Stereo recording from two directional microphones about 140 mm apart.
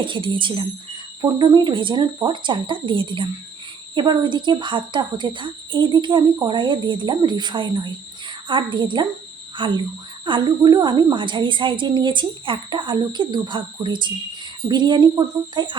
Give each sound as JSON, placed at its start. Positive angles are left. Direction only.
{"t": 0.0, "sound": "speech", "side_deg": -35}